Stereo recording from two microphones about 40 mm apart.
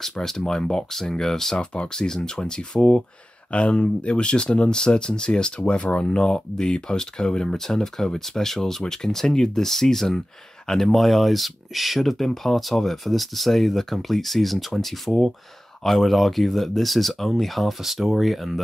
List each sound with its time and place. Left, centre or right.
0.2 s speech: centre
1.6 s speech: left
1.9 s speech: centre